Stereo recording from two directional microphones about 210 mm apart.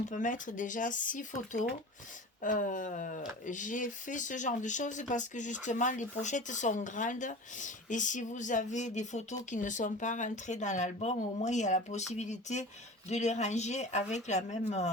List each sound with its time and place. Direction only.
0.1 s speech: 40° left (ahead or behind)